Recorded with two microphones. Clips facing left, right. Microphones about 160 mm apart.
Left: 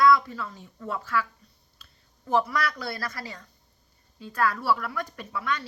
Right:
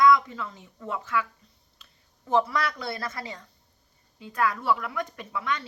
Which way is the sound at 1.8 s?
20° right (ahead or behind).